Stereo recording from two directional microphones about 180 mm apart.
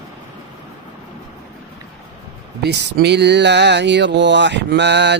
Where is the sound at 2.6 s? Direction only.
65° right (ahead or behind).